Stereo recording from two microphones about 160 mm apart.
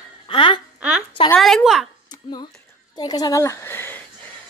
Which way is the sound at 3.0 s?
25° left (ahead or behind).